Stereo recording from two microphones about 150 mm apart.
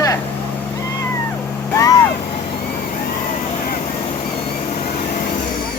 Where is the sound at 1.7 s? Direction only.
25° left (ahead or behind).